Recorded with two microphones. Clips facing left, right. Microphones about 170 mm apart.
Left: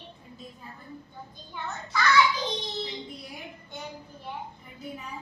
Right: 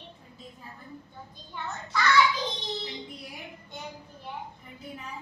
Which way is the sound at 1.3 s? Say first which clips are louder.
Even; centre (ahead or behind).